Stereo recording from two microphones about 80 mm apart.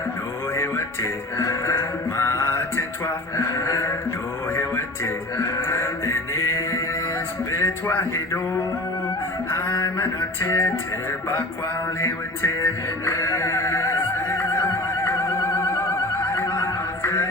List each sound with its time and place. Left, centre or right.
0.5 s music: left
3.3 s a sound: left
5.0 s music: left
7.5 s speech: left
9.5 s music: left
12.0 s music: left